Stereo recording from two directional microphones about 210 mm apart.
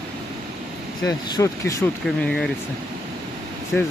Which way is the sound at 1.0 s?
15° left (ahead or behind).